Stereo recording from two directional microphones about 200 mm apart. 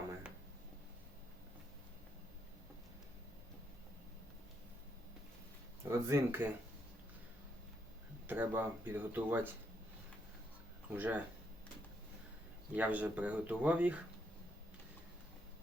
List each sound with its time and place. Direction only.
5.8 s speech: 15° right (ahead or behind)
8.3 s speech: 10° right (ahead or behind)
10.9 s speech: 10° right (ahead or behind)
12.7 s speech: 10° right (ahead or behind)